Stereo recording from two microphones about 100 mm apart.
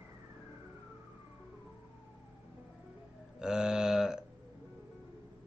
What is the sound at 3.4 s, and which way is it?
Speech, 5° right (ahead or behind).